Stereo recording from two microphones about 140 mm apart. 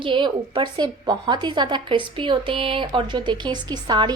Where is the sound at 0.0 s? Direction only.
35° right (ahead or behind).